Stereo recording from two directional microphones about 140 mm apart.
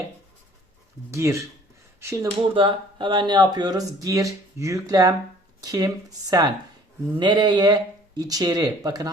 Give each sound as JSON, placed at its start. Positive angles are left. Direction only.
{"t": 1.1, "sound": "speech", "side_deg": -20}
{"t": 2.6, "sound": "speech", "side_deg": -35}